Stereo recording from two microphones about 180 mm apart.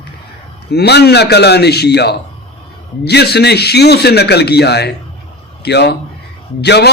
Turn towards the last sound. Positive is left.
turn(degrees=65)  # may be behind; listen again after turning